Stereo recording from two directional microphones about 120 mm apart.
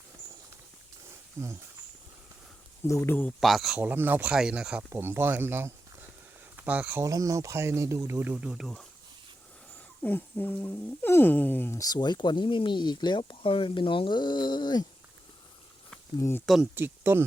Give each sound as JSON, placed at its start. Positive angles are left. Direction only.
{"t": 1.4, "sound": "speech", "side_deg": -20}
{"t": 2.8, "sound": "speech", "side_deg": 25}
{"t": 3.4, "sound": "speech", "side_deg": 0}
{"t": 3.8, "sound": "speech", "side_deg": -15}
{"t": 7.0, "sound": "speech", "side_deg": -30}
{"t": 10.0, "sound": "speech", "side_deg": 15}
{"t": 11.8, "sound": "speech", "side_deg": 35}
{"t": 16.7, "sound": "speech", "side_deg": -20}